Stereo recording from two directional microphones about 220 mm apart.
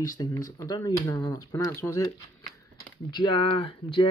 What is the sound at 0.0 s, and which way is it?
Speech, 15° left (ahead or behind).